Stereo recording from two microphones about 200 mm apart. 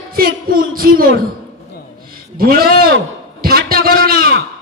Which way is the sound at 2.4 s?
50° right (ahead or behind).